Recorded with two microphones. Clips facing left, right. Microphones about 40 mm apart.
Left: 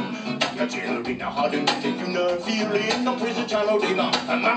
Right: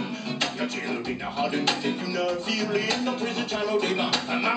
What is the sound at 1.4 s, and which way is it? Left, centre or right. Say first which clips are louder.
Music: left 2 dB; centre.